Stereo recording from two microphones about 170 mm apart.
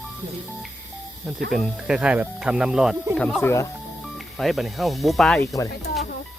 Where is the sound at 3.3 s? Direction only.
15° left (ahead or behind).